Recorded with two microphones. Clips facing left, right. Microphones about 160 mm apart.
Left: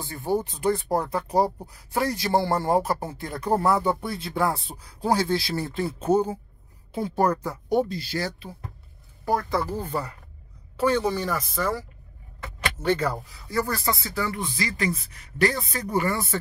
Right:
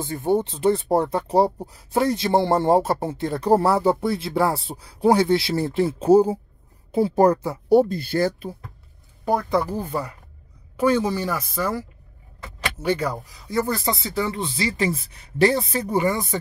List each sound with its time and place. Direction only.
0.0 s speech: 20° right (ahead or behind)
7.9 s speech: 55° right (ahead or behind)
9.2 s speech: 20° right (ahead or behind)
12.8 s speech: 10° right (ahead or behind)